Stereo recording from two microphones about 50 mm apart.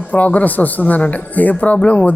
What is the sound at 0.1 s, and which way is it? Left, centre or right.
Speech, left.